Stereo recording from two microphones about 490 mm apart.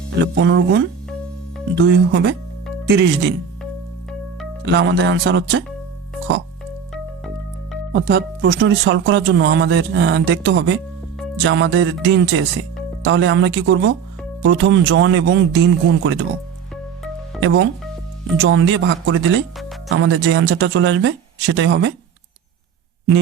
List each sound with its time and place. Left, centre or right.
0.3 s speech: right
4.6 s speech: right
6.9 s music: centre
7.9 s speech: centre
17.4 s speech: right